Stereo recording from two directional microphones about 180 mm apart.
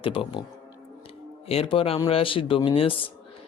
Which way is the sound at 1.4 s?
30° left (ahead or behind).